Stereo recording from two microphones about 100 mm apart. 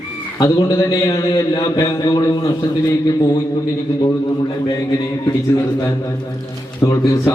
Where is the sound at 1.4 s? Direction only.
45° left (ahead or behind).